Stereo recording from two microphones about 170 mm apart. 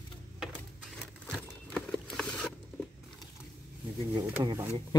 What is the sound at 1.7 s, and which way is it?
Clip-clop, 5° left (ahead or behind).